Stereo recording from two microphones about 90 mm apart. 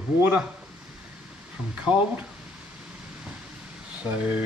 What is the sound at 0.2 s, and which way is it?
Speech, 15° right (ahead or behind).